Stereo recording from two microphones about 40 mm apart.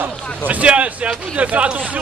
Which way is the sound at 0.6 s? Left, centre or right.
Right.